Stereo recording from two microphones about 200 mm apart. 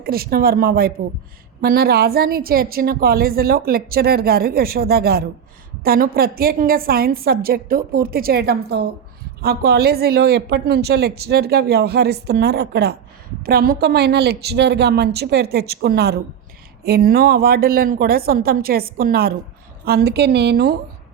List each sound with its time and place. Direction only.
0.0 s a woman's voice: 50° right (ahead or behind)